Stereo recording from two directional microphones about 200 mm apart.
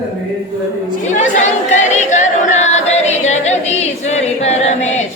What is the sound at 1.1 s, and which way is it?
Choir, 35° left (ahead or behind).